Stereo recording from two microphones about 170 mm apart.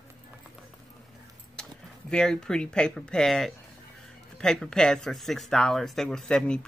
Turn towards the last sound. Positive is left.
turn(degrees=5)  # may be behind; listen again after turning